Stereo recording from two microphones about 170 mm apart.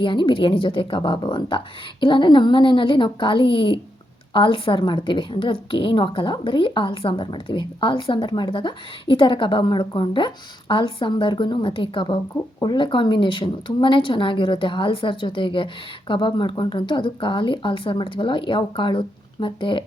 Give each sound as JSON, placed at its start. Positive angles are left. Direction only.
{"t": 0.0, "sound": "a woman's voice", "side_deg": 30}